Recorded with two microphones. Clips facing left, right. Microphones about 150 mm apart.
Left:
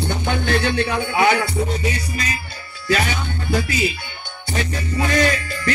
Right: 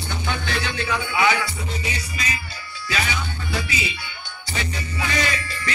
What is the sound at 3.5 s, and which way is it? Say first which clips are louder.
Music: left 8 dB; 50° left (ahead or behind).